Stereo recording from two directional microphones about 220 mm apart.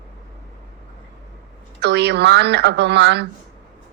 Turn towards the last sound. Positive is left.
turn(degrees=-50)  # may be behind; listen again after turning